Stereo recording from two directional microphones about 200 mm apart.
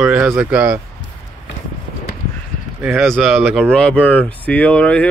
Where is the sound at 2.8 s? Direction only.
Centre (ahead or behind).